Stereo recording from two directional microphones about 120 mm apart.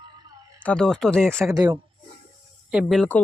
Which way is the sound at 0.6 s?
10° left (ahead or behind).